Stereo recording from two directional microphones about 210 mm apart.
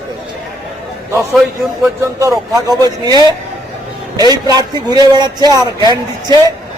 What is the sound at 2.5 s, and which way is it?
A man's voice, 20° right (ahead or behind).